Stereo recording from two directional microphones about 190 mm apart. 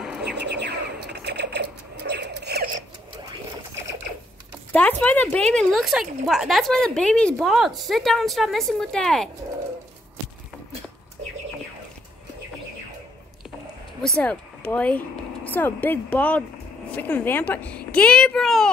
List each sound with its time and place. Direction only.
0.0 s bird: 5° right (ahead or behind)
0.4 s a sound: 65° right (ahead or behind)
5.0 s a woman's voice: 10° left (ahead or behind)
14.0 s a child's voice: 5° left (ahead or behind)